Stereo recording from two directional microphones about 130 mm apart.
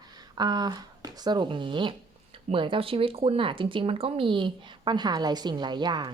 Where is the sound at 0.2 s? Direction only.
30° right (ahead or behind).